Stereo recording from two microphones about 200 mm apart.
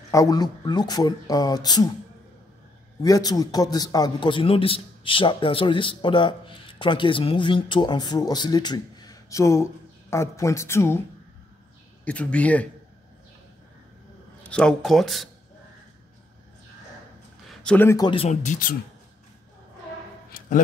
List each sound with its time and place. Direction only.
0.1 s a man's voice: 20° left (ahead or behind)
3.0 s a man's voice: 20° left (ahead or behind)
12.0 s speech: 5° left (ahead or behind)
14.5 s speech: 5° left (ahead or behind)
17.5 s a man's voice: 5° left (ahead or behind); by 18.8 s 40° left (ahead or behind)
20.2 s a sound: 45° left (ahead or behind)